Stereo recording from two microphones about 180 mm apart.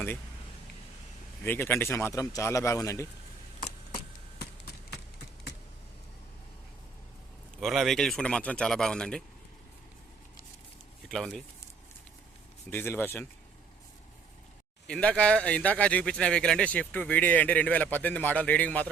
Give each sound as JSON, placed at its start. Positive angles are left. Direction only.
{"t": 1.5, "sound": "speech", "side_deg": 10}
{"t": 7.6, "sound": "speech", "side_deg": 0}
{"t": 11.1, "sound": "speech", "side_deg": 0}
{"t": 12.7, "sound": "speech", "side_deg": 10}
{"t": 14.8, "sound": "speech", "side_deg": 5}